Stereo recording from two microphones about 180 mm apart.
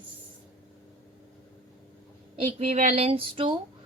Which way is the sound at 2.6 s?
35° right (ahead or behind).